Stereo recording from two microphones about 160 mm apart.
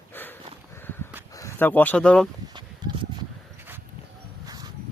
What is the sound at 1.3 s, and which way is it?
Speech, 15° left (ahead or behind).